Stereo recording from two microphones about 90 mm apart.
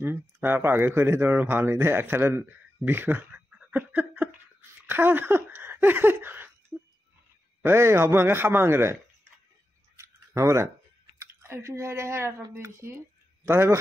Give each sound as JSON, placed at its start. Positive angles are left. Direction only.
{"t": 0.0, "sound": "speech", "side_deg": -25}
{"t": 7.6, "sound": "a man's voice", "side_deg": -30}
{"t": 9.9, "sound": "a sound", "side_deg": -35}
{"t": 11.1, "sound": "a man's voice", "side_deg": -30}